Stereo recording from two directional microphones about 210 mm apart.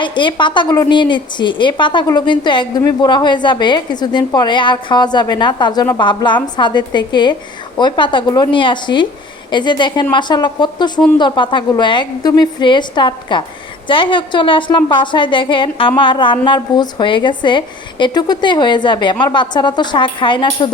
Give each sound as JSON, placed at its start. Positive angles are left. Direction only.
{"t": 0.0, "sound": "a woman's voice", "side_deg": 20}